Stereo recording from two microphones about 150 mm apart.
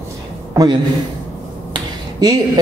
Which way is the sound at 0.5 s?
25° right (ahead or behind).